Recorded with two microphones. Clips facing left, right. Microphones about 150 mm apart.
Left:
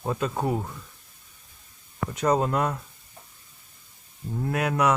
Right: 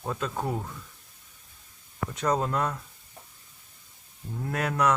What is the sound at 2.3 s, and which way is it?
Speech, 10° left (ahead or behind).